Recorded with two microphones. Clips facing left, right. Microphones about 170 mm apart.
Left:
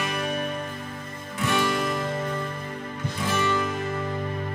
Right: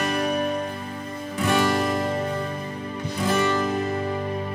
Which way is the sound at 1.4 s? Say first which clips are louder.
Right 3 dB; 45° right (ahead or behind).